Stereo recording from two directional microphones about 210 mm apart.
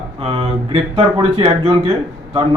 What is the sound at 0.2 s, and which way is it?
Speech, 25° right (ahead or behind).